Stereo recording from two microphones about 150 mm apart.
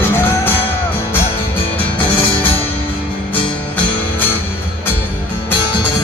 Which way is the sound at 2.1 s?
35° left (ahead or behind).